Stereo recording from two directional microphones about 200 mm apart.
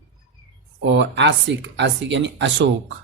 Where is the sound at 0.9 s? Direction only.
60° right (ahead or behind).